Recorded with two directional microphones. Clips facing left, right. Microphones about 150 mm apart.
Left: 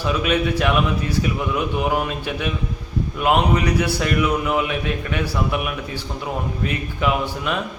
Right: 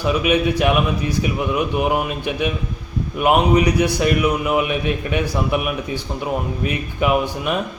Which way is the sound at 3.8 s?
15° right (ahead or behind).